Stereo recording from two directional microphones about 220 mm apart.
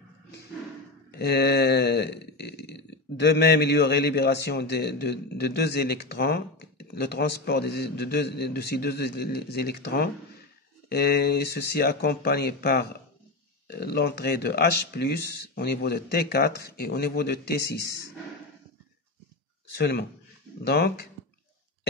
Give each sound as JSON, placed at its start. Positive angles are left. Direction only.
{"t": 1.1, "sound": "a sound", "side_deg": 45}
{"t": 10.9, "sound": "speech", "side_deg": 45}
{"t": 19.8, "sound": "speech", "side_deg": 50}